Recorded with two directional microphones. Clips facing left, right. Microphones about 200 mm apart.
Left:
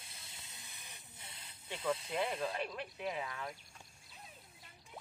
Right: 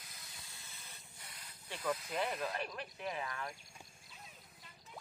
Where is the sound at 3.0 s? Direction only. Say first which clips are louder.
Left 1 dB; 10° left (ahead or behind).